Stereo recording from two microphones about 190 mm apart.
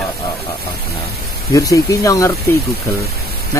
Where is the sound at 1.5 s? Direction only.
15° left (ahead or behind).